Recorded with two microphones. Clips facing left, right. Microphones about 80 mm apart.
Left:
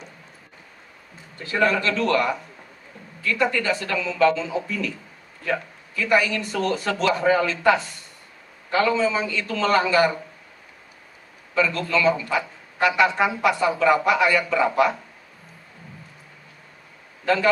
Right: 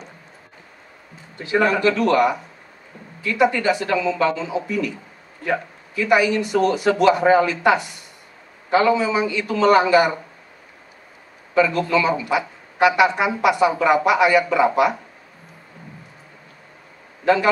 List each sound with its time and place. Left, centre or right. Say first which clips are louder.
1.4 s speech: right 4 dB; centre
11.5 s speech: right 4 dB; centre